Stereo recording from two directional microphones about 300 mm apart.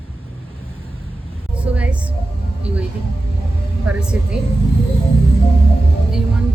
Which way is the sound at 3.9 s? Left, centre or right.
Centre.